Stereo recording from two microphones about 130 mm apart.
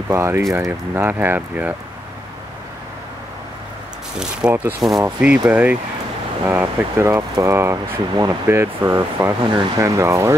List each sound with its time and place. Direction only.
0.1 s speech: 20° right (ahead or behind)
4.2 s speech: 5° right (ahead or behind)
9.4 s speech: 35° right (ahead or behind)
9.8 s speech: 20° right (ahead or behind)